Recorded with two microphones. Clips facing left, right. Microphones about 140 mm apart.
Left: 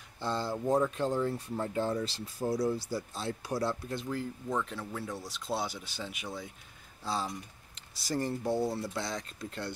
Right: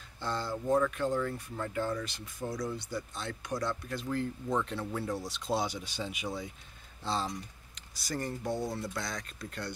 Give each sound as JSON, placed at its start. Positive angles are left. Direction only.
{"t": 0.2, "sound": "speech", "side_deg": 20}
{"t": 4.5, "sound": "speech", "side_deg": 0}
{"t": 7.7, "sound": "typing", "side_deg": 25}
{"t": 8.5, "sound": "speech", "side_deg": 5}
{"t": 8.9, "sound": "speech", "side_deg": 25}